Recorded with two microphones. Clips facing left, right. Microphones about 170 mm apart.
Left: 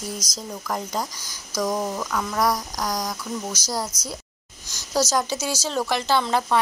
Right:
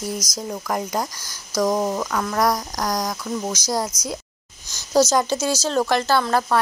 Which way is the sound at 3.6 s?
15° right (ahead or behind).